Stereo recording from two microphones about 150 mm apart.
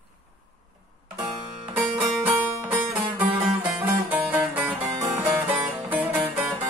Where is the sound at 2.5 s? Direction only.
10° right (ahead or behind).